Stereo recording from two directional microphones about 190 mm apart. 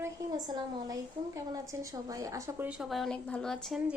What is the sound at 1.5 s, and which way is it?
A woman's voice, 20° right (ahead or behind).